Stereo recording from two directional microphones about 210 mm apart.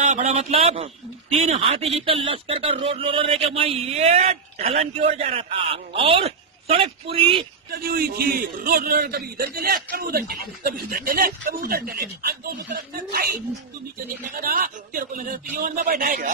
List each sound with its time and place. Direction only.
0.0 s a man's voice: 35° right (ahead or behind)
7.7 s a man's voice: 45° right (ahead or behind)